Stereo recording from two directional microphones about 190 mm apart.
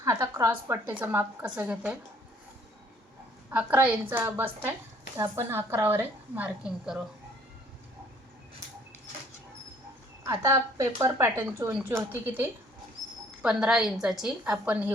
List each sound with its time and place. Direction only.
0.0 s a woman's voice: 15° right (ahead or behind)
3.5 s a woman's voice: 10° right (ahead or behind)
10.2 s a woman's voice: 20° right (ahead or behind)